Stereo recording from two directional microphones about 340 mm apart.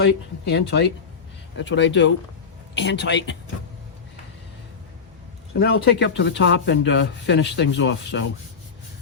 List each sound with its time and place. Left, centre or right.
0.0 s speech: left
5.5 s speech: left